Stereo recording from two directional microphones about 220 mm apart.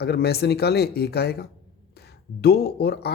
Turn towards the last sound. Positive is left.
turn(degrees=45)  # may be behind; listen again after turning